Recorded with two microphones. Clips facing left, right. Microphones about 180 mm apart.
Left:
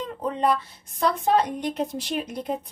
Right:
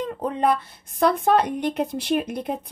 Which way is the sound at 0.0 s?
55° right (ahead or behind).